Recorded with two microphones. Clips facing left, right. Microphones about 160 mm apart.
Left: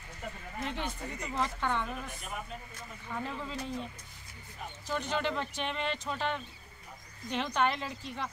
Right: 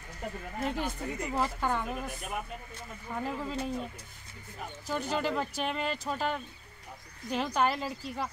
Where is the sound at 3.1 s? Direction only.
20° right (ahead or behind).